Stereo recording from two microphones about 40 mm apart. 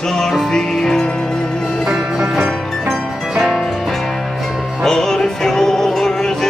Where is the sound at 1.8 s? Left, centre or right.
Centre.